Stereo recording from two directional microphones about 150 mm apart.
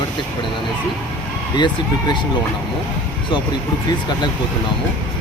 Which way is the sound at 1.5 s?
30° left (ahead or behind).